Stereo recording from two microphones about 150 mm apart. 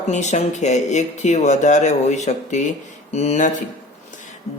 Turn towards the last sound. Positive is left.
turn(degrees=50)  # may be behind; listen again after turning